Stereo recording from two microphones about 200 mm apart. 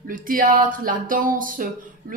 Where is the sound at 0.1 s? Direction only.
45° right (ahead or behind).